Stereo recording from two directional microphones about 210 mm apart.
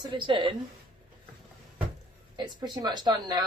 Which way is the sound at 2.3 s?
20° right (ahead or behind).